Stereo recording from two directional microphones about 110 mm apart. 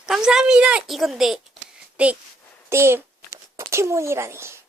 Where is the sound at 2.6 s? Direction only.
25° right (ahead or behind).